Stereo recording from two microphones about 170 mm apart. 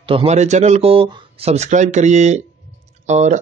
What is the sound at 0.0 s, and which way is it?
Speech, 30° right (ahead or behind).